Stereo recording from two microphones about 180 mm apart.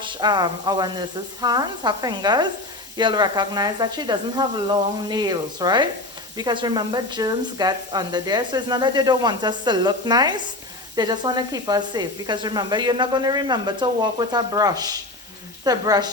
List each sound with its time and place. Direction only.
0.0 s speech: 25° right (ahead or behind)